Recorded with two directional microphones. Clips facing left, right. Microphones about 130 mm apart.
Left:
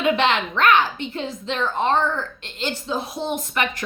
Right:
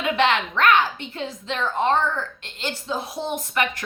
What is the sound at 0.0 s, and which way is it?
A woman's voice, 25° left (ahead or behind).